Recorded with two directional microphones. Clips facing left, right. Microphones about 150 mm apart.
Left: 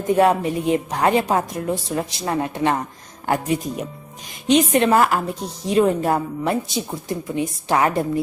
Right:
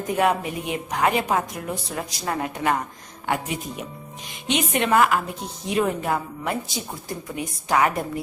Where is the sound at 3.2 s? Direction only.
40° left (ahead or behind).